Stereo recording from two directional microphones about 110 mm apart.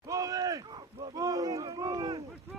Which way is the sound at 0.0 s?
30° right (ahead or behind).